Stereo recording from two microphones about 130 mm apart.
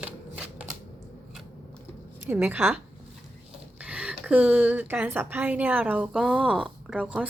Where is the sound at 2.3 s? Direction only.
15° right (ahead or behind).